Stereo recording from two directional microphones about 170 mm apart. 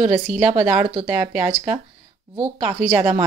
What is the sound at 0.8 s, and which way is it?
Speech, 35° right (ahead or behind).